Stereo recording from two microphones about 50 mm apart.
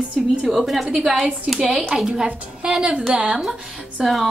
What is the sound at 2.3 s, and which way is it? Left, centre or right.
A woman's voice, right.